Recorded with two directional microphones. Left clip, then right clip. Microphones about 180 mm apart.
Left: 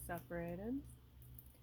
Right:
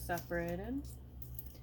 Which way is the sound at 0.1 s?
50° left (ahead or behind).